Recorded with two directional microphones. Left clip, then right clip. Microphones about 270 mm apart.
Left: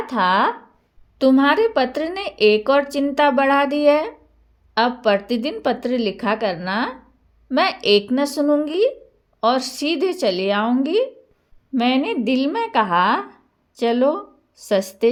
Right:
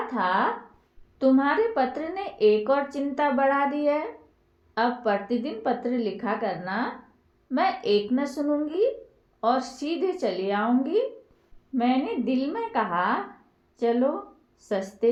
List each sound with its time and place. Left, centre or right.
0.0 s a woman's voice: left